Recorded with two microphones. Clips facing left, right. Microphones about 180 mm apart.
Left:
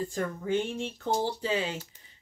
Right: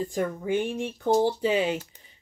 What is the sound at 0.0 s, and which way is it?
Speech, 15° right (ahead or behind).